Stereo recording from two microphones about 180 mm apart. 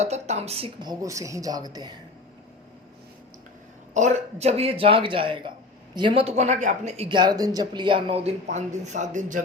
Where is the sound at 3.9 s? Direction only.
40° right (ahead or behind).